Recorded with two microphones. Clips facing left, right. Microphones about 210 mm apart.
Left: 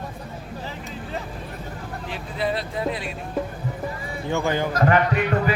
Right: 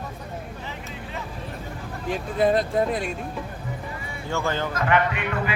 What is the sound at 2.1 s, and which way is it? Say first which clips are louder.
Speech: right 6 dB; 45° right (ahead or behind).